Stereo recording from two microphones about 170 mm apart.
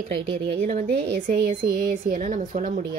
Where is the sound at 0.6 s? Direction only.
50° right (ahead or behind).